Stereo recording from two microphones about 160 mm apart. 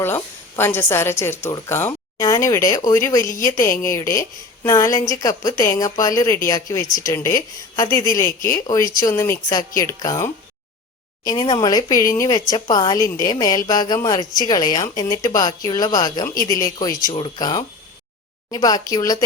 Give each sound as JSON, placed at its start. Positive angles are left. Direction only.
{"t": 0.0, "sound": "a woman's voice", "side_deg": 15}